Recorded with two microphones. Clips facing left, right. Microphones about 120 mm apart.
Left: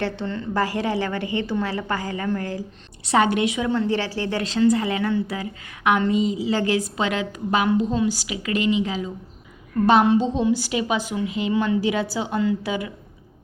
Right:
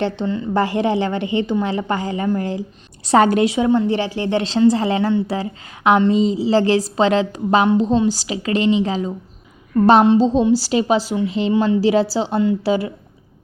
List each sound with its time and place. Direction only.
0.0 s speech: 15° right (ahead or behind)
3.0 s a woman's voice: 40° right (ahead or behind)
3.7 s speech: 20° right (ahead or behind)
8.0 s a woman's voice: 35° right (ahead or behind)